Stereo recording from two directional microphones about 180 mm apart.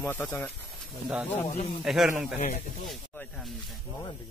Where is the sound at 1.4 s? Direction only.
40° left (ahead or behind).